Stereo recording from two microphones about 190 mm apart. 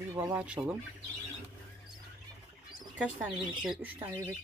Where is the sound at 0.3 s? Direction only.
5° right (ahead or behind).